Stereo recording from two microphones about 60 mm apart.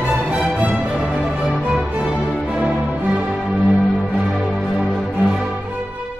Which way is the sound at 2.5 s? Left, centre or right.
Centre.